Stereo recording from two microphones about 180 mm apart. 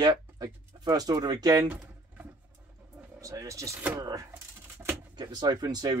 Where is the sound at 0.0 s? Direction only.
20° right (ahead or behind).